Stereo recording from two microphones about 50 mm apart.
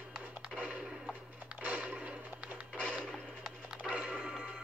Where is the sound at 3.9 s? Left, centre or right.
Right.